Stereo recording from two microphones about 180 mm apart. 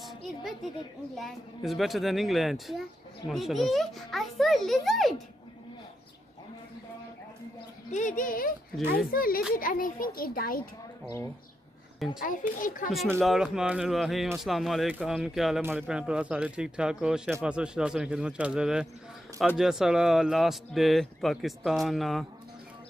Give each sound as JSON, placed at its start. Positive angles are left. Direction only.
{"t": 0.0, "sound": "a woman's voice", "side_deg": 0}
{"t": 7.9, "sound": "a child's voice", "side_deg": 45}
{"t": 12.2, "sound": "a child's voice", "side_deg": 50}
{"t": 13.2, "sound": "speech", "side_deg": 0}